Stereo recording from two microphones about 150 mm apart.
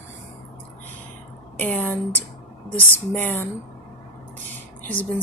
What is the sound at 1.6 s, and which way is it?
Speech, 10° left (ahead or behind).